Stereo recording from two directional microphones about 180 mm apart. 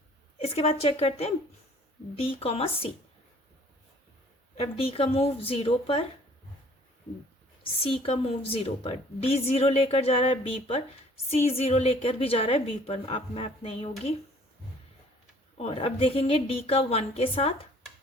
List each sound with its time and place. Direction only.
0.4 s a woman's voice: 35° left (ahead or behind)
4.5 s a woman's voice: 35° left (ahead or behind)
7.6 s a woman's voice: 30° left (ahead or behind)
15.5 s a woman's voice: 35° left (ahead or behind)